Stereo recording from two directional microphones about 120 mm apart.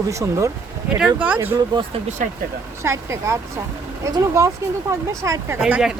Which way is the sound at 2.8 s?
25° right (ahead or behind).